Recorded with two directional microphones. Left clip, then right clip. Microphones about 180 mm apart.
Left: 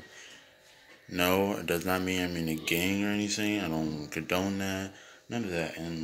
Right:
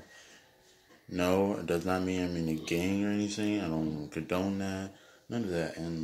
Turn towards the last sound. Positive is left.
turn(degrees=-20)  # may be behind; listen again after turning